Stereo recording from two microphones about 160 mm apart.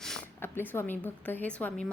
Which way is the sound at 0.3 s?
15° left (ahead or behind).